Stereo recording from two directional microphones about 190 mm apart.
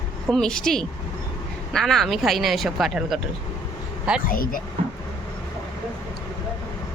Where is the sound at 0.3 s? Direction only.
5° left (ahead or behind).